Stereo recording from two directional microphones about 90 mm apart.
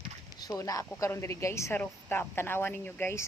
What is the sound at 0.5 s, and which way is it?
A woman's voice, 40° left (ahead or behind).